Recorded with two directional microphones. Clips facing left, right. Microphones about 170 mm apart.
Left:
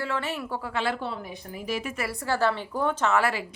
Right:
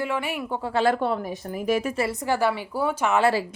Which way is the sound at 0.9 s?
55° right (ahead or behind).